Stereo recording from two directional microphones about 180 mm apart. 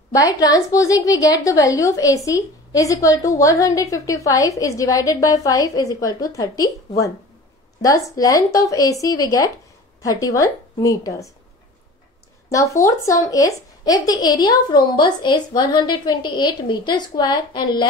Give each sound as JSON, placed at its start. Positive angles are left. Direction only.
{"t": 0.1, "sound": "a woman's voice", "side_deg": 20}
{"t": 7.8, "sound": "a woman's voice", "side_deg": 20}
{"t": 12.4, "sound": "a woman's voice", "side_deg": 15}